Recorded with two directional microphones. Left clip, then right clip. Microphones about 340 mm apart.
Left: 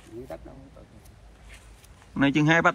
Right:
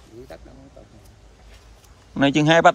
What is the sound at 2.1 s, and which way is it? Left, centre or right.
Speech, centre.